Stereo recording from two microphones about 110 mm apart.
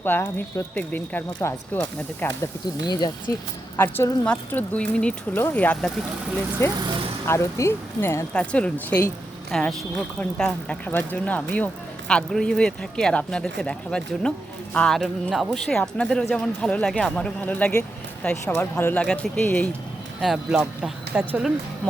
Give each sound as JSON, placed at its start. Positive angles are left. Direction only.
{"t": 0.0, "sound": "speech", "side_deg": 20}
{"t": 2.8, "sound": "speech", "side_deg": 40}
{"t": 3.8, "sound": "speech", "side_deg": 20}
{"t": 6.6, "sound": "speech", "side_deg": 25}
{"t": 8.3, "sound": "speech", "side_deg": 10}
{"t": 20.2, "sound": "speech", "side_deg": -5}